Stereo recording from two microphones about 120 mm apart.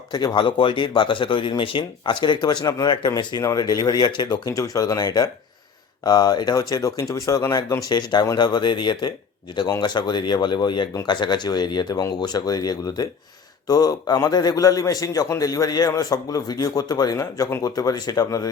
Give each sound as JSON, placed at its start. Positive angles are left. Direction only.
{"t": 0.1, "sound": "speech", "side_deg": 35}